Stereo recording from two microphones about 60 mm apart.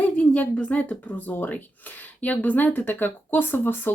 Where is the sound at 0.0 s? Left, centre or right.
Left.